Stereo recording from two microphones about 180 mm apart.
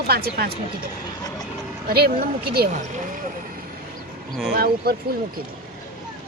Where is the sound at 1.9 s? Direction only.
60° right (ahead or behind).